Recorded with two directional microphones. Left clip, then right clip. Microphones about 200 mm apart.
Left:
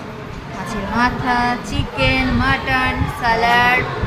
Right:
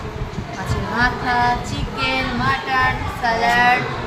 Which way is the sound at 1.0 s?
15° left (ahead or behind).